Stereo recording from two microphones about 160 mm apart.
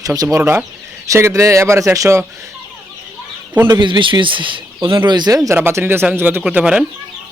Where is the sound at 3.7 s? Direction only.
30° right (ahead or behind); by 6.8 s 5° right (ahead or behind).